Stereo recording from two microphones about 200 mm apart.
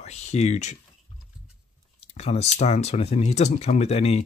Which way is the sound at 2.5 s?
30° left (ahead or behind).